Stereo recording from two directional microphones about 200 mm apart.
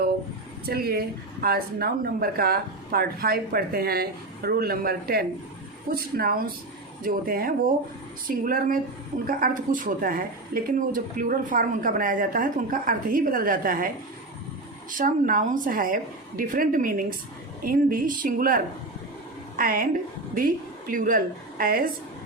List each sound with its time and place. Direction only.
0.6 s a woman's voice: 50° right (ahead or behind)
14.9 s a woman's voice: 40° right (ahead or behind)